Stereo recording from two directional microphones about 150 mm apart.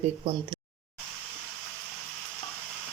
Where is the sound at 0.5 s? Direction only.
30° right (ahead or behind).